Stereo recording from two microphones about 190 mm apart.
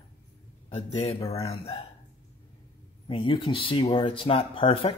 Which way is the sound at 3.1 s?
25° left (ahead or behind).